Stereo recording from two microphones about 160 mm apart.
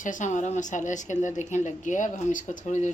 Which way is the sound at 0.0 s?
55° left (ahead or behind).